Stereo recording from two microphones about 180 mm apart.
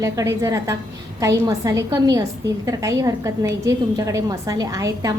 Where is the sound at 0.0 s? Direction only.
20° right (ahead or behind).